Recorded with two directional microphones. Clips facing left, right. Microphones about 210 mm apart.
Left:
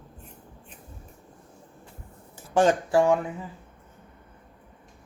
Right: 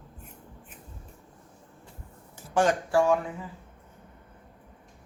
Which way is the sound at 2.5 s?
25° left (ahead or behind).